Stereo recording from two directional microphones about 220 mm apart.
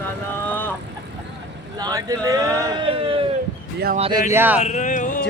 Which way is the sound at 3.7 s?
45° right (ahead or behind).